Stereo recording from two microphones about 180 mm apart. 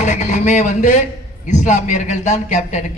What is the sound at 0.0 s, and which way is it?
Speech, 40° left (ahead or behind).